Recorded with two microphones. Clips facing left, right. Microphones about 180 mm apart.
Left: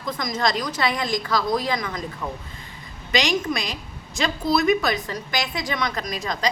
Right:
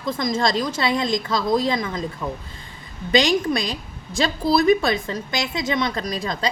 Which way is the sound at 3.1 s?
30° right (ahead or behind).